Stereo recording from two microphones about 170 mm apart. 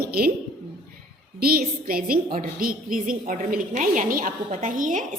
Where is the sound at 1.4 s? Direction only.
65° right (ahead or behind).